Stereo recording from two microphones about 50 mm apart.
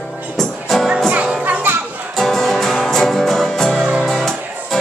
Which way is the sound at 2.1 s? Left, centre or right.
Centre.